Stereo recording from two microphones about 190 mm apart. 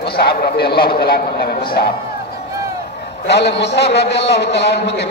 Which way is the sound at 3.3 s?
65° left (ahead or behind).